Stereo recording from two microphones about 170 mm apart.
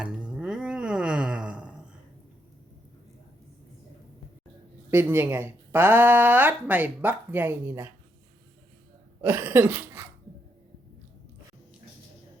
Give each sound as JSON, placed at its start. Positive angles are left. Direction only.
{"t": 0.0, "sound": "a sound", "side_deg": -5}
{"t": 4.9, "sound": "speech", "side_deg": -15}
{"t": 9.2, "sound": "speech", "side_deg": -10}